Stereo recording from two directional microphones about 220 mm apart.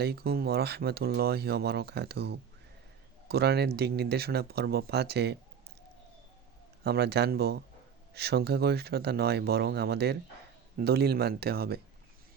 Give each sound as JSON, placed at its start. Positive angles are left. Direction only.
{"t": 0.0, "sound": "speech", "side_deg": -45}
{"t": 6.8, "sound": "speech", "side_deg": -45}